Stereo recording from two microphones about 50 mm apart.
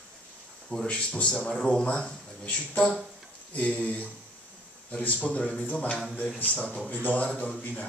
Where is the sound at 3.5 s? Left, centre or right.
Left.